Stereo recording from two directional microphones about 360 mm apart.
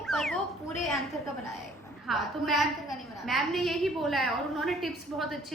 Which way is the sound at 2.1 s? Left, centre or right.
Centre.